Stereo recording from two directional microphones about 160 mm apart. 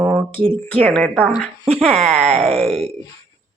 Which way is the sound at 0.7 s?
5° left (ahead or behind).